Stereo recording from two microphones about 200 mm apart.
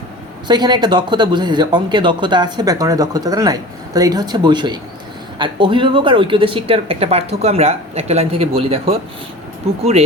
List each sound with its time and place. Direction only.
0.4 s speech: 20° right (ahead or behind)